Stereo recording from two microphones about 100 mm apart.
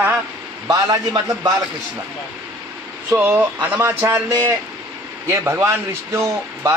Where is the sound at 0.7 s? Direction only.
40° right (ahead or behind).